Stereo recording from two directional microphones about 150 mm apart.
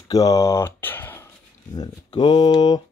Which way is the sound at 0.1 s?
25° left (ahead or behind).